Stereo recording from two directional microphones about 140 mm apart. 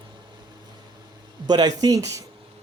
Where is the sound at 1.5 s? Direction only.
30° right (ahead or behind).